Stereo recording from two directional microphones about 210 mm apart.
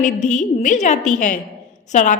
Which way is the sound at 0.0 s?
35° left (ahead or behind).